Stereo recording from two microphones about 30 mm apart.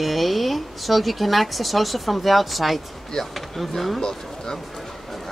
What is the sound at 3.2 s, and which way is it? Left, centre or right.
Speech, centre.